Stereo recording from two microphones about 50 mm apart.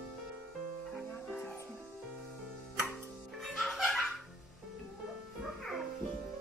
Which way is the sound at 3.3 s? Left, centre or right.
Centre.